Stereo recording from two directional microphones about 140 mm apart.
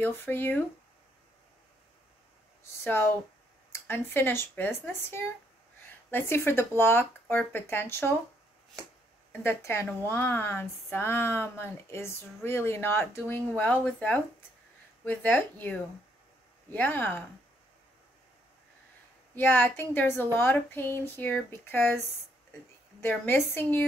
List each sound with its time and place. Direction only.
0.0 s speech: 15° left (ahead or behind)
2.6 s speech: 15° left (ahead or behind)
9.3 s speech: 15° left (ahead or behind)
19.3 s speech: 15° left (ahead or behind)